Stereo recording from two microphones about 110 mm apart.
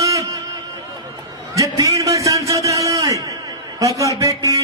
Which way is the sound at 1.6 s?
30° right (ahead or behind).